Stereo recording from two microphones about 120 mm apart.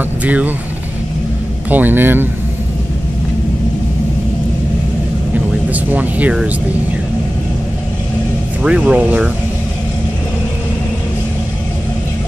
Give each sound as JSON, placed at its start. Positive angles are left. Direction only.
{"t": 0.2, "sound": "speech", "side_deg": -10}
{"t": 1.7, "sound": "speech", "side_deg": -15}
{"t": 5.7, "sound": "speech", "side_deg": -15}
{"t": 8.6, "sound": "speech", "side_deg": -10}